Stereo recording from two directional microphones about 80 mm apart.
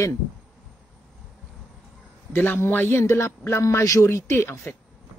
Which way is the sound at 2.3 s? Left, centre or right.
Left.